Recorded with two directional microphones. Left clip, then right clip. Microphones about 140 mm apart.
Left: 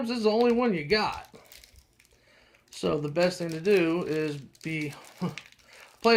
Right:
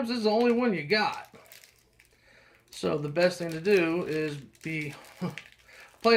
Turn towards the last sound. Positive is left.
turn(degrees=10)  # may be behind; listen again after turning